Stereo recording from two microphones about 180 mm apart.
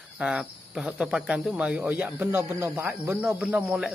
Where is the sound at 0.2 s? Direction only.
5° right (ahead or behind).